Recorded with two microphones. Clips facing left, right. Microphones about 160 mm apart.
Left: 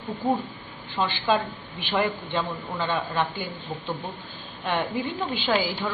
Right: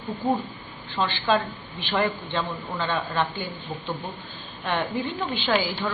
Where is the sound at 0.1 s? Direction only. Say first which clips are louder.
Even; centre (ahead or behind).